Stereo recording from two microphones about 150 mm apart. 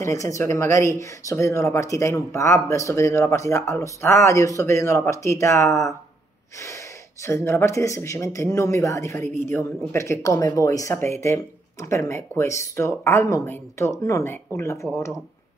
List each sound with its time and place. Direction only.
0.0 s speech: 20° left (ahead or behind)
7.2 s speech: 15° left (ahead or behind)